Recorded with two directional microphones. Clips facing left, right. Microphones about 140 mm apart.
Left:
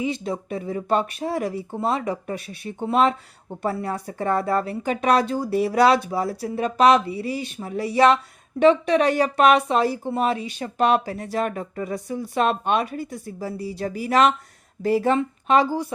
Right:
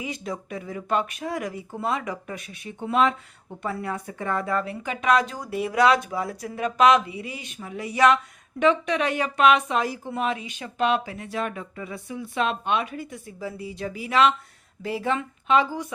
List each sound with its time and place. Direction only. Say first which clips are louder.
0.0 s a woman's voice: left 6 dB; 30° left (ahead or behind)